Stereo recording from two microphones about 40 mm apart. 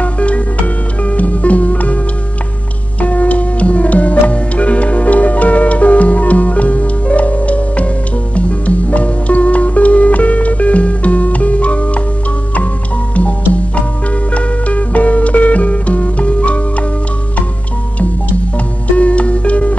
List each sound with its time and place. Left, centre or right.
0.0 s music: left
3.0 s music: left
14.3 s music: left
18.9 s music: left